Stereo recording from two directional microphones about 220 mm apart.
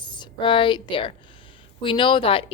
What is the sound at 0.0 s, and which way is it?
A woman's voice, 20° left (ahead or behind).